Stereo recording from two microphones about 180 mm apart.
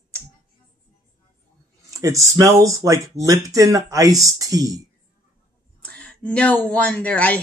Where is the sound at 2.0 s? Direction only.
20° right (ahead or behind).